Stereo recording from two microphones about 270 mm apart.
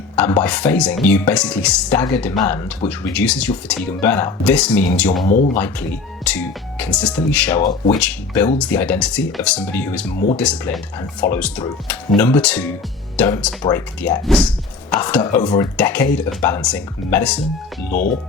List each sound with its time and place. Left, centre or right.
0.2 s speech: centre
5.2 s speech: left
5.5 s speech: centre